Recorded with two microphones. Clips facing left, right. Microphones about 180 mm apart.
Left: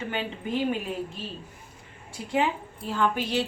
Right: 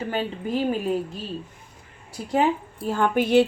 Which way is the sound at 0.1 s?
35° right (ahead or behind).